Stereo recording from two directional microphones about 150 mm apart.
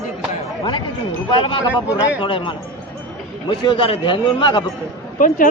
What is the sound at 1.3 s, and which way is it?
A man's voice, 35° left (ahead or behind).